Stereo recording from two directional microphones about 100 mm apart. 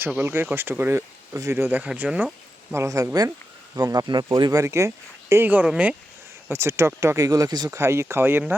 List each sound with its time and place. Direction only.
0.2 s speech: 20° right (ahead or behind)
1.8 s speech: 10° right (ahead or behind)
2.7 s speech: 30° right (ahead or behind)
3.8 s speech: 45° right (ahead or behind)
4.6 s speech: 30° right (ahead or behind); by 6.0 s 10° right (ahead or behind)
6.5 s speech: 25° right (ahead or behind); by 7.8 s 40° right (ahead or behind)
7.8 s speech: 25° right (ahead or behind)